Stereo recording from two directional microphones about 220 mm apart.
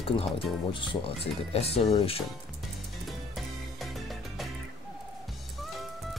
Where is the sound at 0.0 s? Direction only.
25° left (ahead or behind).